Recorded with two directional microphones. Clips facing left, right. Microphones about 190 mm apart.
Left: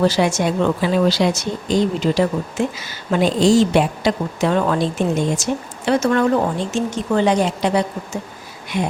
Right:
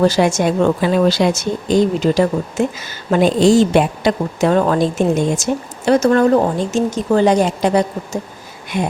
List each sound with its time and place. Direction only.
0.0 s speech: 45° right (ahead or behind)